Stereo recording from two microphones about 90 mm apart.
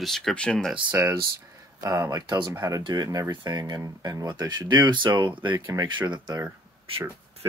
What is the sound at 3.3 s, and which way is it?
Speech, 55° right (ahead or behind).